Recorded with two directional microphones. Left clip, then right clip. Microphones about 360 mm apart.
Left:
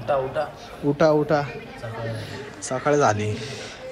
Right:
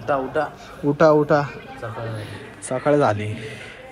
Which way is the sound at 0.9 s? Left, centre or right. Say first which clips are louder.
Right 3 dB; centre.